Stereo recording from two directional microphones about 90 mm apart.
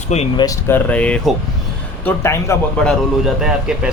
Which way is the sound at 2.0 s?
25° left (ahead or behind).